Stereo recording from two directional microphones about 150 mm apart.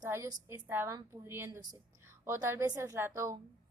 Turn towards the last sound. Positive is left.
turn(degrees=-20)  # may be behind; listen again after turning